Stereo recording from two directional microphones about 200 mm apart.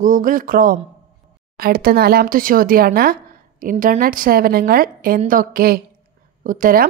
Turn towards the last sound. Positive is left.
turn(degrees=-45)  # may be behind; listen again after turning